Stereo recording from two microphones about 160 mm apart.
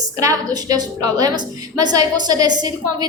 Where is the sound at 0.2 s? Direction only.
20° right (ahead or behind).